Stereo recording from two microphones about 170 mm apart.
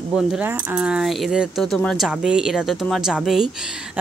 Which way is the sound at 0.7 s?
5° right (ahead or behind).